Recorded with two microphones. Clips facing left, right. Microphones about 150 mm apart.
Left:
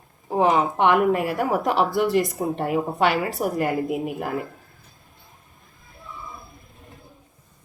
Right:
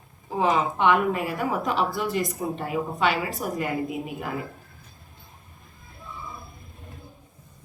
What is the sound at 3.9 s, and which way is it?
Speech, 55° left (ahead or behind).